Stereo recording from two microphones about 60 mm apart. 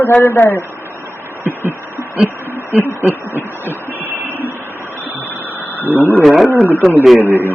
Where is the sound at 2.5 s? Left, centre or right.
Right.